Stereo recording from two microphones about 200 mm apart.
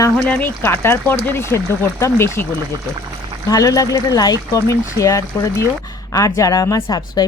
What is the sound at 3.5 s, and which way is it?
Speech, 15° left (ahead or behind).